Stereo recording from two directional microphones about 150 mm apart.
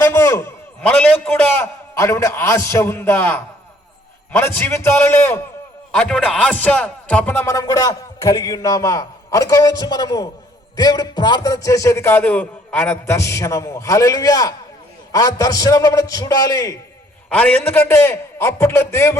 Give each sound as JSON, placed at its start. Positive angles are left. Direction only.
{"t": 0.1, "sound": "a man's voice", "side_deg": 20}
{"t": 17.2, "sound": "a man's voice", "side_deg": 10}